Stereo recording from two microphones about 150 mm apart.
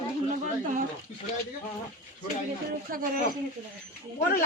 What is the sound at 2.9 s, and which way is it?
Speech, 75° right (ahead or behind).